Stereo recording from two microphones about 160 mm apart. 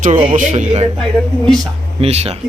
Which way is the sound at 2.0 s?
40° right (ahead or behind).